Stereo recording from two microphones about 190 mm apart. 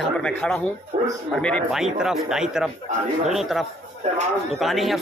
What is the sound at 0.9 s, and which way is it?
Speech, 35° right (ahead or behind).